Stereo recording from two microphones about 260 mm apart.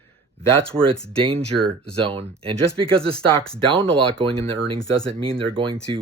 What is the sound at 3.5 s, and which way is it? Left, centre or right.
Speech, right.